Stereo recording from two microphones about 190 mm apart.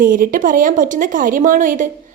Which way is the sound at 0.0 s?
45° right (ahead or behind).